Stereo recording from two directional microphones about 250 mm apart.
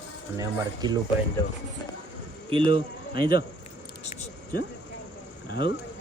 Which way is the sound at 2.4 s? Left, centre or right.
Right.